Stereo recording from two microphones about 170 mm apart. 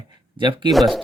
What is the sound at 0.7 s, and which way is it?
Speech, centre (ahead or behind).